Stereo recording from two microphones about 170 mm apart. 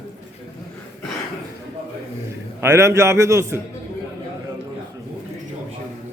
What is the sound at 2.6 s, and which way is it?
A man's voice, 15° right (ahead or behind).